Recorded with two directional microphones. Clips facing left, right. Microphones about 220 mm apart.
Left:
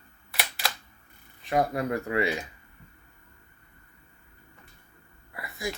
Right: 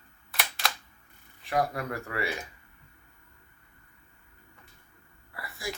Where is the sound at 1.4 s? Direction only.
20° left (ahead or behind).